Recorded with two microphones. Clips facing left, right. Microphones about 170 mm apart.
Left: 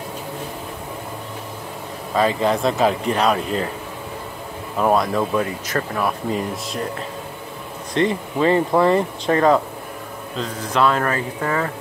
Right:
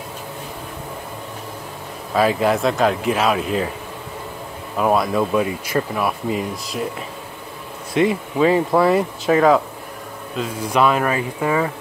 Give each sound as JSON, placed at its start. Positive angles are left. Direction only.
{"t": 2.1, "sound": "speech", "side_deg": -5}
{"t": 4.7, "sound": "speech", "side_deg": -5}
{"t": 7.9, "sound": "speech", "side_deg": -10}